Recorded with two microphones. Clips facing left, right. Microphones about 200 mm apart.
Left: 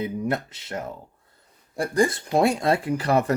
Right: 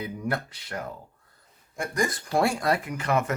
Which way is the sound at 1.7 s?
35° left (ahead or behind).